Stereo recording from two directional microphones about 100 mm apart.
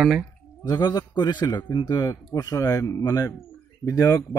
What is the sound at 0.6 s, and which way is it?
A man's voice, 45° left (ahead or behind).